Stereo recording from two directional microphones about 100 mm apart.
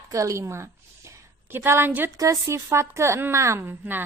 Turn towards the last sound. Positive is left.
turn(degrees=-20)  # may be behind; listen again after turning